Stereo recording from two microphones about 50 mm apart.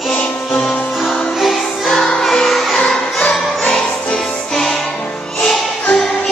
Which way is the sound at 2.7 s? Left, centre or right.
Centre.